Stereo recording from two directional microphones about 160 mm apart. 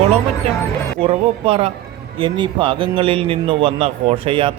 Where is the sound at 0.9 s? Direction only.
35° right (ahead or behind).